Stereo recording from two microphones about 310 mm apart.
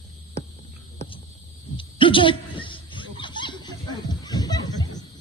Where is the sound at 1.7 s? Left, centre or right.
Centre.